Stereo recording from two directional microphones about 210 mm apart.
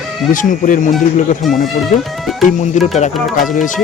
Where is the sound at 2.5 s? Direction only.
35° left (ahead or behind).